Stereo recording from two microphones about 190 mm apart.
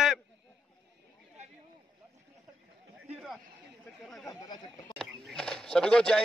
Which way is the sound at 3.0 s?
Centre (ahead or behind).